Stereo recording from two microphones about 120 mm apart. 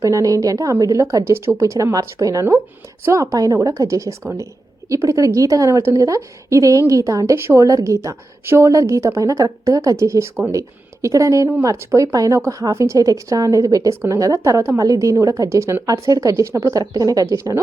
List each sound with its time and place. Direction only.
0.0 s a woman's voice: 30° right (ahead or behind)